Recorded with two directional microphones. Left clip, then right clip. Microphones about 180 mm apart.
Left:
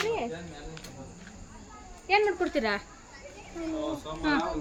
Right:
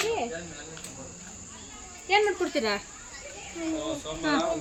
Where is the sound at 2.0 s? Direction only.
20° left (ahead or behind).